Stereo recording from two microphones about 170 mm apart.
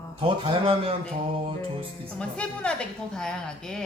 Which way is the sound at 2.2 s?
5° left (ahead or behind).